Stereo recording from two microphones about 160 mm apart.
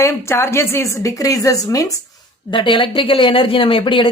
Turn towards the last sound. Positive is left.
turn(degrees=30)  # may be behind; listen again after turning